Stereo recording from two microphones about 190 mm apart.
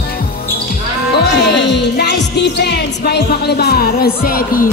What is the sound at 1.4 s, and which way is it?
Music, 65° left (ahead or behind).